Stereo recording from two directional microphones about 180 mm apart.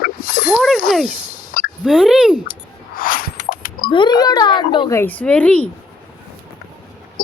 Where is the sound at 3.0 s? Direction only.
50° left (ahead or behind).